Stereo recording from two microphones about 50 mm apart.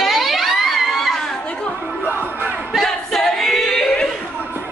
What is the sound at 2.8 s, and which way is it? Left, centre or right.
A capella, centre.